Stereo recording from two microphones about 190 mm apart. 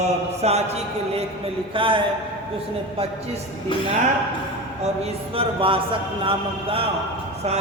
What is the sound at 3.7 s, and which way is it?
Speech, 25° left (ahead or behind).